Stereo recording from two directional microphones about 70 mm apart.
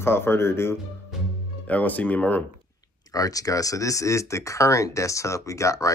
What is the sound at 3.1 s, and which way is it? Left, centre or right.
Speech, left.